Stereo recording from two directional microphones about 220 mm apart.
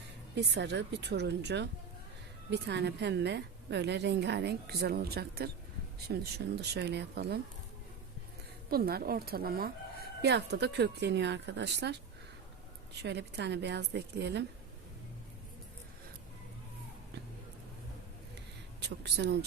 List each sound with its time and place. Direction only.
0.3 s a woman's voice: 50° right (ahead or behind)
8.7 s a woman's voice: 45° right (ahead or behind)
13.0 s a woman's voice: 50° right (ahead or behind)
18.8 s speech: 50° right (ahead or behind)